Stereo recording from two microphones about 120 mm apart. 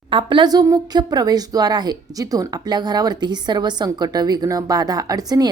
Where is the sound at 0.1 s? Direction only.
40° right (ahead or behind).